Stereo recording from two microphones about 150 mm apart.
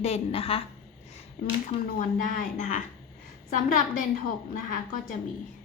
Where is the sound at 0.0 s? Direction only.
40° left (ahead or behind).